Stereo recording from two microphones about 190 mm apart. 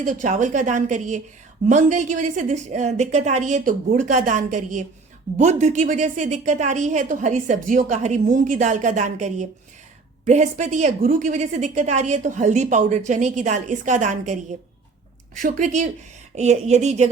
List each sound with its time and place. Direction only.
0.0 s a woman's voice: 40° right (ahead or behind)
15.4 s a woman's voice: 45° right (ahead or behind)